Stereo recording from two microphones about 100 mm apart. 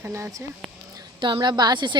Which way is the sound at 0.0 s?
30° right (ahead or behind).